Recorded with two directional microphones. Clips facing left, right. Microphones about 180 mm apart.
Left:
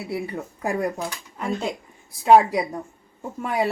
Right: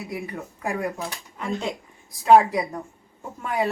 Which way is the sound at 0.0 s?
35° left (ahead or behind).